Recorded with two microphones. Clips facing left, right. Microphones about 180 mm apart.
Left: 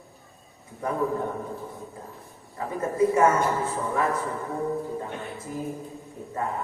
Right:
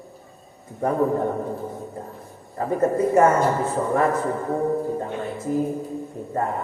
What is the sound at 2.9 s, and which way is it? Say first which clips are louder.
A man's voice: right 1 dB; 55° right (ahead or behind).